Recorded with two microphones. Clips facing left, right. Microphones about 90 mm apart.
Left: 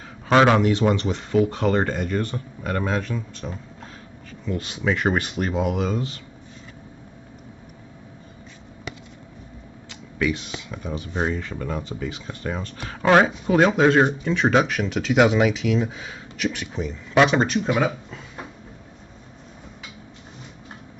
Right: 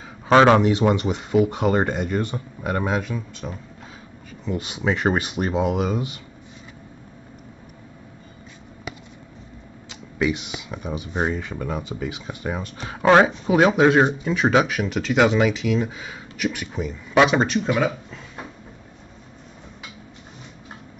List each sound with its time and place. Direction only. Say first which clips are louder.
0.3 s speech: right 2 dB; 20° right (ahead or behind); by 3.5 s 5° right (ahead or behind)
4.5 s speech: right 1 dB; 20° right (ahead or behind)
9.8 s speech: right 1 dB; 20° right (ahead or behind); by 18.2 s 5° left (ahead or behind)